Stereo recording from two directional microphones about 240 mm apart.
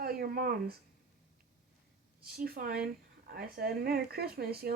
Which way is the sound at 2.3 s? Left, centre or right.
Right.